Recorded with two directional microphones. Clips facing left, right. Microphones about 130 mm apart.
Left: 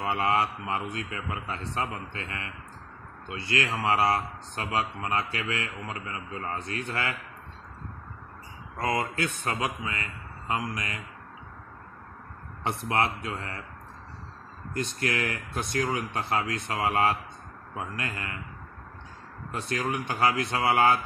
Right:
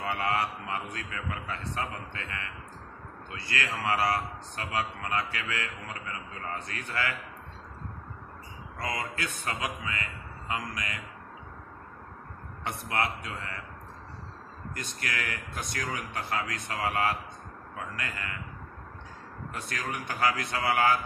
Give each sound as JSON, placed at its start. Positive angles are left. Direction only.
{"t": 0.0, "sound": "a man's voice", "side_deg": 25}
{"t": 8.8, "sound": "a man's voice", "side_deg": 30}
{"t": 10.5, "sound": "a man's voice", "side_deg": 30}
{"t": 12.6, "sound": "a man's voice", "side_deg": 30}
{"t": 14.7, "sound": "a man's voice", "side_deg": 30}
{"t": 19.5, "sound": "a man's voice", "side_deg": 25}